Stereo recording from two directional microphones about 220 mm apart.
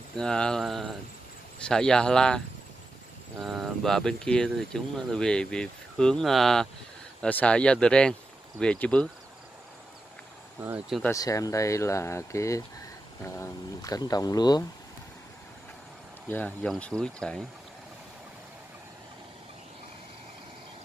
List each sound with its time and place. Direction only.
0.1 s speech: 5° left (ahead or behind)
10.6 s speech: 10° right (ahead or behind)
11.0 s speech: 15° left (ahead or behind)
16.3 s speech: 5° left (ahead or behind)